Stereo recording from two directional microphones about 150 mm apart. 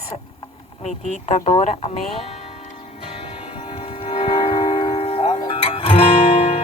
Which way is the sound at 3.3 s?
40° left (ahead or behind).